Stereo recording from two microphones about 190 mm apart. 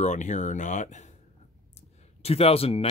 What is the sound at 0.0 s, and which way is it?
Speech, 40° left (ahead or behind).